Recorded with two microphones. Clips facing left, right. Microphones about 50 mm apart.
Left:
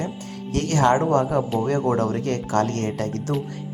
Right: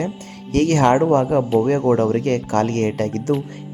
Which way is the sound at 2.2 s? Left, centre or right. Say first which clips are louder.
Right 3 dB; right.